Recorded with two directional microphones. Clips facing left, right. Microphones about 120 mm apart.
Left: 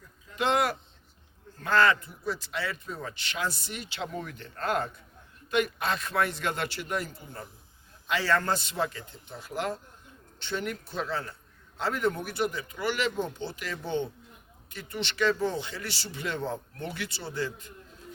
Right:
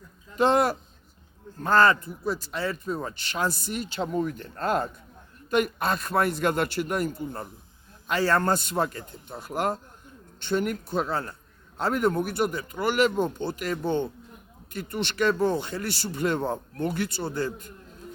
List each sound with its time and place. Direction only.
0.3 s a man's voice: 40° right (ahead or behind)